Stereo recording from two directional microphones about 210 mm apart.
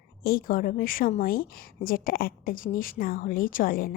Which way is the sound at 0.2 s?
45° left (ahead or behind).